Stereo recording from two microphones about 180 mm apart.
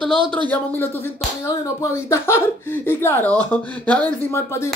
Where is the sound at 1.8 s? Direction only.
15° left (ahead or behind).